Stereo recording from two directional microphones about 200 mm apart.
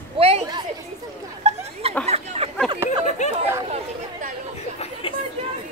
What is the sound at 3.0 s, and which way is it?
Chatter, 35° left (ahead or behind).